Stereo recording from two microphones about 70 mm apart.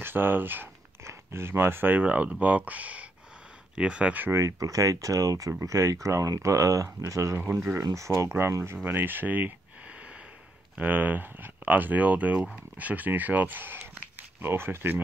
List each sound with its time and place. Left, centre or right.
0.0 s speech: right
4.2 s speech: right
8.8 s speech: right
10.8 s speech: right